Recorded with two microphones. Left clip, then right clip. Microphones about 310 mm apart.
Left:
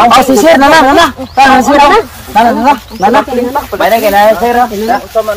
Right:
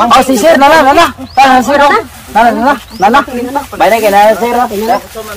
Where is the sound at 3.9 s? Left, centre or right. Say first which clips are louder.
Even; right.